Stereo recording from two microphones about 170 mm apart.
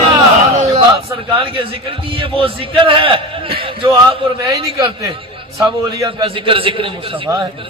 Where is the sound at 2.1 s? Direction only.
30° right (ahead or behind).